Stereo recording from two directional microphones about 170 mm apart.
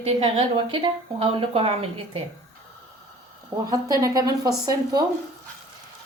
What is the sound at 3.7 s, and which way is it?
Speech, 20° right (ahead or behind).